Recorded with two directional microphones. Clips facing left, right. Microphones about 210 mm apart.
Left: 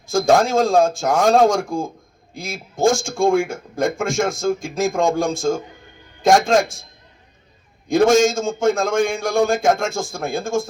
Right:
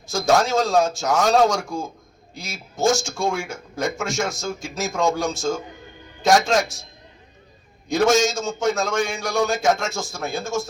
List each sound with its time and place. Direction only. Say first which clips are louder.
0.1 s a man's voice: left 4 dB; 50° left (ahead or behind)
7.9 s a man's voice: left 4 dB; 50° left (ahead or behind)